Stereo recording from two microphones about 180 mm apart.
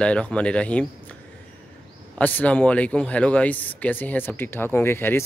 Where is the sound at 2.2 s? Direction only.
10° left (ahead or behind).